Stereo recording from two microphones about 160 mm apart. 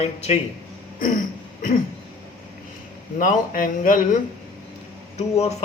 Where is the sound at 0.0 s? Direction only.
45° left (ahead or behind).